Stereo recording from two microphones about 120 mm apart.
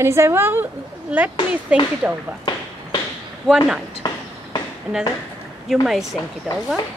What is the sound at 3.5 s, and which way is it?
Speech, 5° left (ahead or behind).